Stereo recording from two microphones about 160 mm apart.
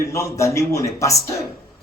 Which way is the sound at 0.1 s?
20° left (ahead or behind).